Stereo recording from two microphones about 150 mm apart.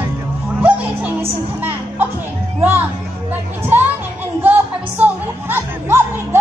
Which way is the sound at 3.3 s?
15° right (ahead or behind).